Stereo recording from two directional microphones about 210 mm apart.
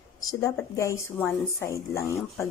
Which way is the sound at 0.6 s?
15° left (ahead or behind).